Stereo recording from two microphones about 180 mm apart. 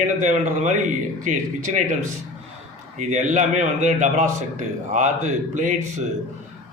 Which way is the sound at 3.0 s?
40° right (ahead or behind).